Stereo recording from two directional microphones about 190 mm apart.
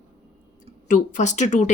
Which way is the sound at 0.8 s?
40° left (ahead or behind).